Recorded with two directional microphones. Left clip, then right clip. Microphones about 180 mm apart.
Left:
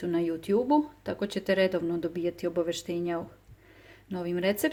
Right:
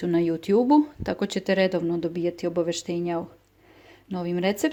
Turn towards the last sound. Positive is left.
turn(degrees=-20)  # may be behind; listen again after turning